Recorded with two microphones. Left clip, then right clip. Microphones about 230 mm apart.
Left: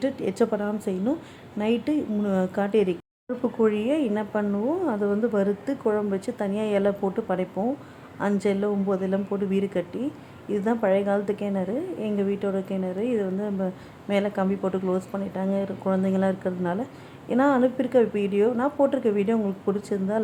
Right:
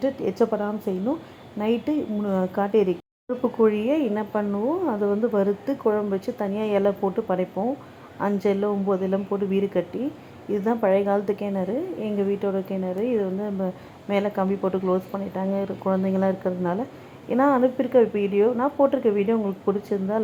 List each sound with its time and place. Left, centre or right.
0.3 s a woman's voice: centre